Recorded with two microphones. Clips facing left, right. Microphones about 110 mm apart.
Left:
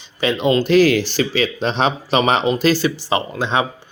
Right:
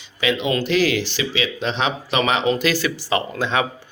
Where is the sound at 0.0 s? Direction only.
35° left (ahead or behind).